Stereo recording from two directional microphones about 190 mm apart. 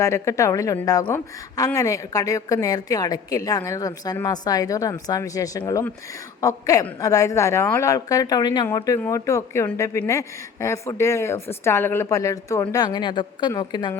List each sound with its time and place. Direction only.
0.0 s a woman's voice: 15° left (ahead or behind)